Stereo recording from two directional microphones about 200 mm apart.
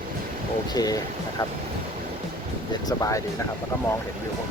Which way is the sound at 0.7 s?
20° left (ahead or behind).